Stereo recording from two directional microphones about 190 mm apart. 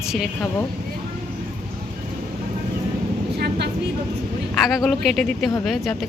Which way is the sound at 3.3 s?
60° right (ahead or behind).